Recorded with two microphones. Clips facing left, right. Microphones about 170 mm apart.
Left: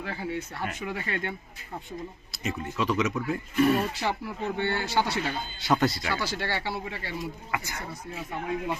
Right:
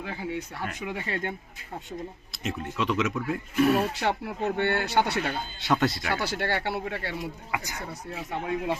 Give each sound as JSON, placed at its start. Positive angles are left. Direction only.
{"t": 0.0, "sound": "speech", "side_deg": -15}
{"t": 1.1, "sound": "speech", "side_deg": -30}
{"t": 2.3, "sound": "speech", "side_deg": 0}
{"t": 4.0, "sound": "speech", "side_deg": -60}
{"t": 5.5, "sound": "speech", "side_deg": 0}
{"t": 6.1, "sound": "speech", "side_deg": -60}
{"t": 7.5, "sound": "speech", "side_deg": -15}
{"t": 8.3, "sound": "speech", "side_deg": -80}